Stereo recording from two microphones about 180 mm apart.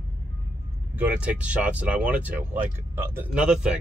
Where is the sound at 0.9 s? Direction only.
5° right (ahead or behind).